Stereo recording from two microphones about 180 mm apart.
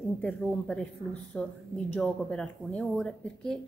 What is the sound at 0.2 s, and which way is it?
A woman's voice, 5° left (ahead or behind).